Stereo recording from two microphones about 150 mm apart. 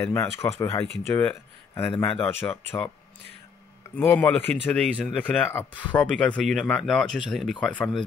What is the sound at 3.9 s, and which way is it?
Speech, 10° left (ahead or behind).